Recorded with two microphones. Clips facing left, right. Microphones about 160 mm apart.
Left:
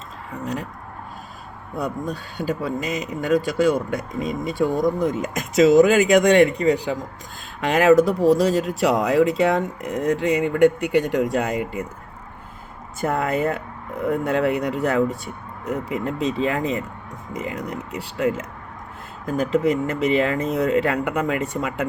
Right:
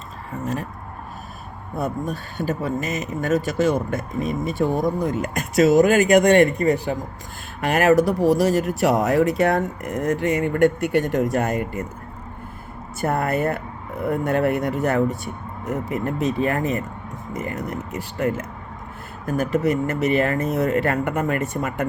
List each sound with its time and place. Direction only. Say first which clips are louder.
0.4 s speech: right 1 dB; 15° left (ahead or behind)
2.1 s speech: even; 15° left (ahead or behind)
13.0 s speech: even; 15° left (ahead or behind)